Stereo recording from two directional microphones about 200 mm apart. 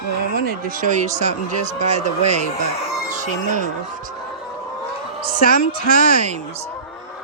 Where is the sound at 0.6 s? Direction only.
40° right (ahead or behind).